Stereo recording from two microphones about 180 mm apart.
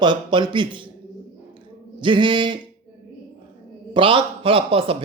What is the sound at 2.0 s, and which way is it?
Speech, 25° right (ahead or behind).